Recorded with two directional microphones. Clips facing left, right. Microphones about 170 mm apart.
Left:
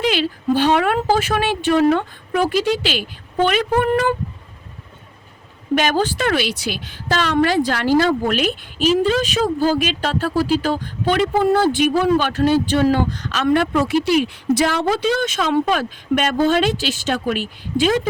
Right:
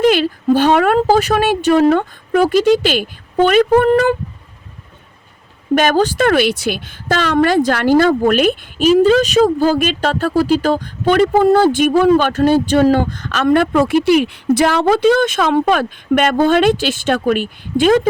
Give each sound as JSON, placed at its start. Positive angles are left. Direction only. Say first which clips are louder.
{"t": 0.0, "sound": "a woman's voice", "louder": "right 7 dB", "side_deg": -50}
{"t": 5.7, "sound": "a woman's voice", "louder": "right 5 dB", "side_deg": -45}